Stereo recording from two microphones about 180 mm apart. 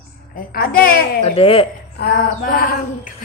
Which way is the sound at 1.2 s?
30° left (ahead or behind).